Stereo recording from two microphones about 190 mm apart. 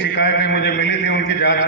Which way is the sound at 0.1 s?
70° left (ahead or behind).